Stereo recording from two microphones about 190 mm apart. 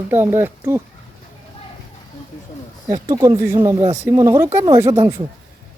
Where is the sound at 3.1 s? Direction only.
20° right (ahead or behind).